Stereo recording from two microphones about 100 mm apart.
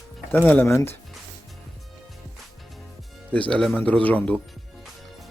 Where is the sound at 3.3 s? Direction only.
10° left (ahead or behind).